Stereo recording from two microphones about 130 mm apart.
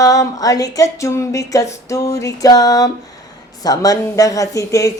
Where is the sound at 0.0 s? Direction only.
25° left (ahead or behind).